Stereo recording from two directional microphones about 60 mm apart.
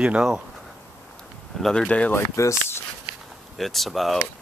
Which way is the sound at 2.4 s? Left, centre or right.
Left.